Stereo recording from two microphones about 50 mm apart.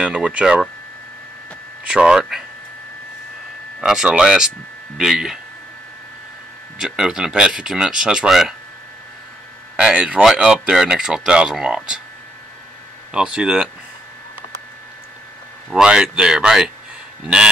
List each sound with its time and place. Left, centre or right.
0.0 s speech: centre
1.9 s speech: centre
3.8 s speech: centre
6.8 s speech: centre
9.8 s speech: centre
13.1 s speech: centre
15.7 s speech: centre